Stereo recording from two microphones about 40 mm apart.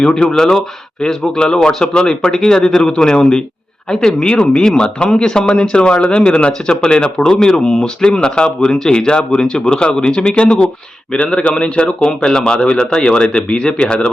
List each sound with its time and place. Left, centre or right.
0.0 s speech: centre